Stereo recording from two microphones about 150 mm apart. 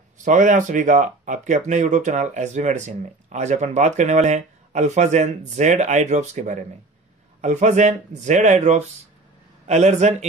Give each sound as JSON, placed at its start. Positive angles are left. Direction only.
{"t": 0.2, "sound": "speech", "side_deg": -55}